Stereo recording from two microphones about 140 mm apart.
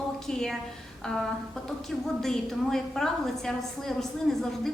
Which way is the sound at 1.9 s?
5° left (ahead or behind).